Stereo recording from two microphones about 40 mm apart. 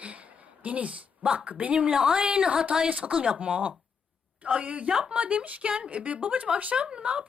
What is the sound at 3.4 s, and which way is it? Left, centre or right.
A woman's voice, right.